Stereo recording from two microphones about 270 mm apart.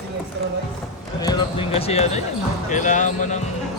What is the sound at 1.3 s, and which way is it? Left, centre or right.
Basketball bounce, centre.